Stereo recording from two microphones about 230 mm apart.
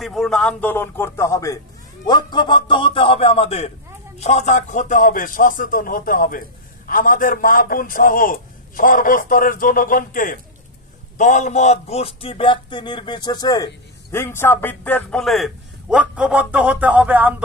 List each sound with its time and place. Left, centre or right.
0.0 s a man's voice: centre